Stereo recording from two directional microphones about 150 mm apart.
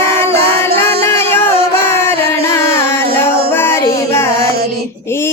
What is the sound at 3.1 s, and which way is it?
Music, 90° right.